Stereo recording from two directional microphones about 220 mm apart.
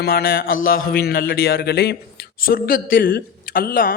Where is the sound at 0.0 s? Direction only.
45° left (ahead or behind).